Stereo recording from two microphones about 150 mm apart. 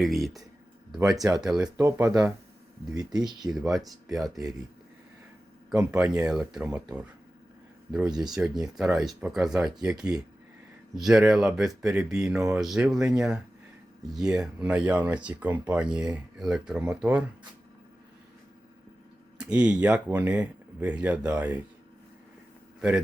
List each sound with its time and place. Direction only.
0.0 s speech: centre (ahead or behind)
0.9 s speech: 25° right (ahead or behind)
1.4 s speech: 5° right (ahead or behind)
1.7 s speech: 20° right (ahead or behind)
3.5 s speech: centre (ahead or behind)
6.0 s speech: 5° right (ahead or behind)
19.4 s speech: 5° right (ahead or behind)